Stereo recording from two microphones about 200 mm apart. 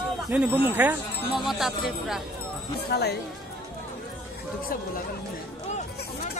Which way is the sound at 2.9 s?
55° left (ahead or behind).